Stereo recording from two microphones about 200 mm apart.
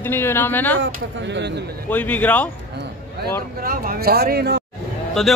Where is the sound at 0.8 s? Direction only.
60° right (ahead or behind).